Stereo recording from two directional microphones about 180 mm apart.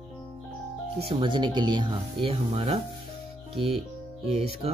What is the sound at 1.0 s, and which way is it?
Speech, 30° right (ahead or behind).